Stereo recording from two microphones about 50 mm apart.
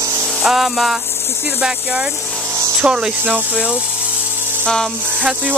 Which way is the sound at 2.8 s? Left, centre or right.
Centre.